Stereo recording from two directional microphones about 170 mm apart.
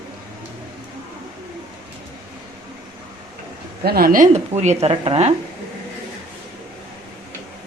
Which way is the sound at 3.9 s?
60° right (ahead or behind).